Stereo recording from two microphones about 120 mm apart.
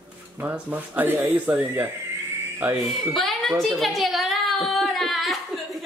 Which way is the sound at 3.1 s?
Centre (ahead or behind).